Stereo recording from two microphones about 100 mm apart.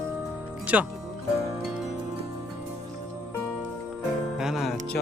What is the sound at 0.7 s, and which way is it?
Speech, 15° right (ahead or behind).